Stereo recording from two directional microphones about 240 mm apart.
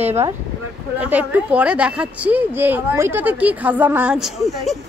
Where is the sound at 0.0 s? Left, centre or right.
Centre.